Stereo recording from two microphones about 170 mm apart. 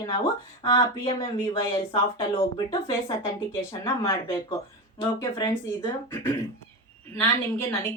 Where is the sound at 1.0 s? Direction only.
35° left (ahead or behind).